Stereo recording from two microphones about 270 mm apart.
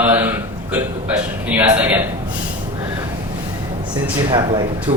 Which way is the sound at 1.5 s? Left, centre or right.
Centre.